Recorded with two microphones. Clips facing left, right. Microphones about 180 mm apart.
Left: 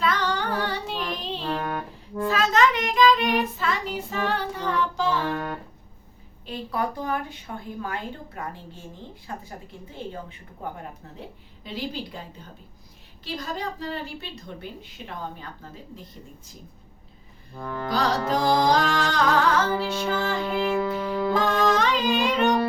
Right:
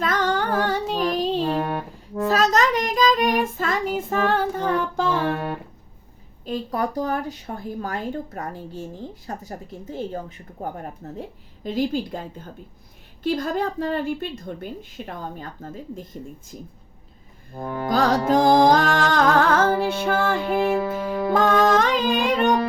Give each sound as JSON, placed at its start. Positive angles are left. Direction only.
{"t": 0.0, "sound": "music", "side_deg": -45}
{"t": 6.4, "sound": "a woman's voice", "side_deg": -40}
{"t": 13.2, "sound": "a woman's voice", "side_deg": -50}
{"t": 17.8, "sound": "a woman's voice", "side_deg": -45}
{"t": 20.5, "sound": "music", "side_deg": -10}
{"t": 21.2, "sound": "music", "side_deg": -50}